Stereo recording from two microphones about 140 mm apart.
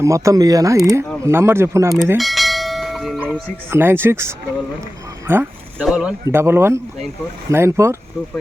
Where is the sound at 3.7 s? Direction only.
15° right (ahead or behind).